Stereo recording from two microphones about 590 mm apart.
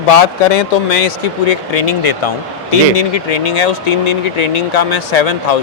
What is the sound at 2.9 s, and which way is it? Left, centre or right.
Speech, left.